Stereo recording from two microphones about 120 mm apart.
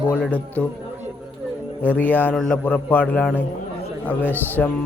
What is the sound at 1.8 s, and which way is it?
Speech, 15° left (ahead or behind).